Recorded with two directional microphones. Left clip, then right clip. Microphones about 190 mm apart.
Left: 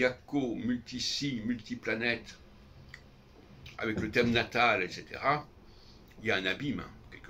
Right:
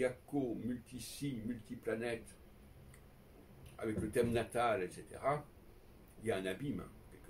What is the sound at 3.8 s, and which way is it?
Speech, 15° right (ahead or behind).